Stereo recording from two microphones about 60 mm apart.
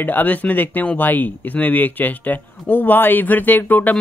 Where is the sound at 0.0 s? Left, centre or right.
Left.